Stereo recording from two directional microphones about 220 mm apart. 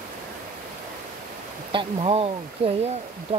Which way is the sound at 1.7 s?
25° right (ahead or behind).